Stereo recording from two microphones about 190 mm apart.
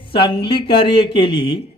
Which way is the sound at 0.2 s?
55° left (ahead or behind).